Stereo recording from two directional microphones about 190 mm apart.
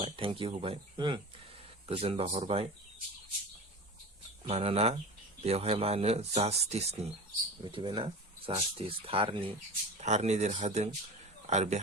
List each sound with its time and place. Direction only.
0.0 s speech: 30° right (ahead or behind)
4.4 s a man's voice: 30° right (ahead or behind)